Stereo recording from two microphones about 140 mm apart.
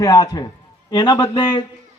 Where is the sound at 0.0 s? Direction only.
25° left (ahead or behind).